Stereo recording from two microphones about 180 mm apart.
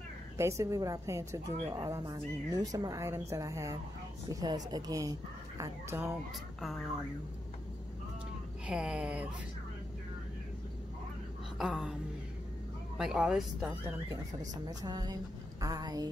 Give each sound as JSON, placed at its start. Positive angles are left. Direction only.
{"t": 0.4, "sound": "a woman's voice", "side_deg": -15}
{"t": 8.6, "sound": "speech", "side_deg": -5}
{"t": 11.5, "sound": "speech", "side_deg": 0}
{"t": 14.7, "sound": "a woman's voice", "side_deg": -20}